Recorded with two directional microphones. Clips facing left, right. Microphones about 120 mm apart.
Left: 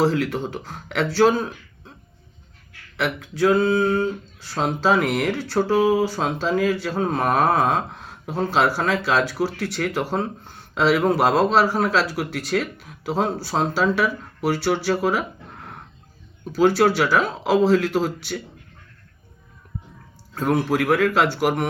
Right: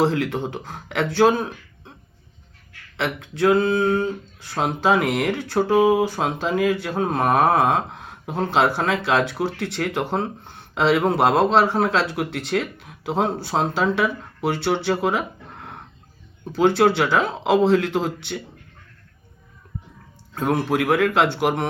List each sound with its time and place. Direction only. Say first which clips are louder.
0.0 s speech: even; 20° right (ahead or behind)
3.0 s speech: even; 20° right (ahead or behind)
16.4 s speech: even; 20° right (ahead or behind)
20.3 s speech: even; 20° right (ahead or behind)